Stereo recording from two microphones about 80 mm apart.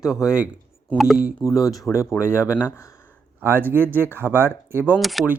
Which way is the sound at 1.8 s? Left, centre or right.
Left.